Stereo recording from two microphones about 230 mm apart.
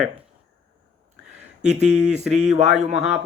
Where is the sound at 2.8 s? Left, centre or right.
Right.